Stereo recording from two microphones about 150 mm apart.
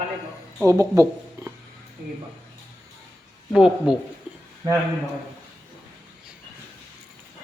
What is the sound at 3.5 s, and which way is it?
Speech, 5° right (ahead or behind).